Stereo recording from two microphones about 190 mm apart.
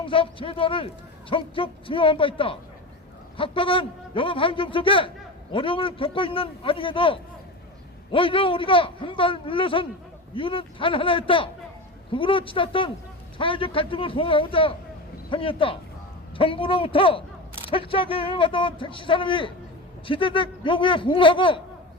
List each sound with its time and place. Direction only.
0.0 s a man's voice: 30° left (ahead or behind)